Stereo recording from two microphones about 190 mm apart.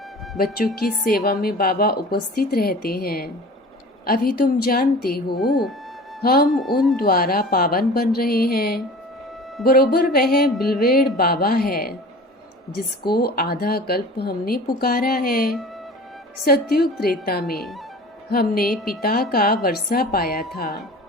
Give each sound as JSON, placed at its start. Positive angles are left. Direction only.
{"t": 1.0, "sound": "speech", "side_deg": 55}
{"t": 5.4, "sound": "speech", "side_deg": 0}
{"t": 6.2, "sound": "speech", "side_deg": 55}
{"t": 6.5, "sound": "speech", "side_deg": 0}
{"t": 6.9, "sound": "speech", "side_deg": 50}
{"t": 13.1, "sound": "a woman's voice", "side_deg": 55}
{"t": 17.5, "sound": "speech", "side_deg": 0}
{"t": 18.3, "sound": "speech", "side_deg": 55}